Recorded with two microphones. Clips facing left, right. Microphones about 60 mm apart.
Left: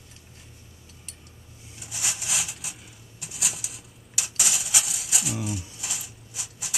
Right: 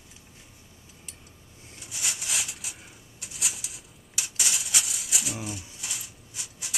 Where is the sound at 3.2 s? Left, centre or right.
Centre.